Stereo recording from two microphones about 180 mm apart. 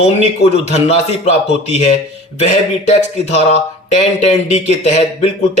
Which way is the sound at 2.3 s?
40° left (ahead or behind).